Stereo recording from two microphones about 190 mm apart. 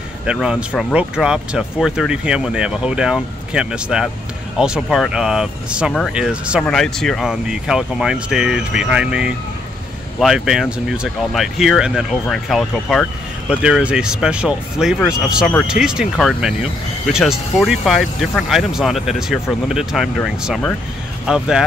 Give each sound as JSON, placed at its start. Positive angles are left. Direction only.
{"t": 0.3, "sound": "speech", "side_deg": -5}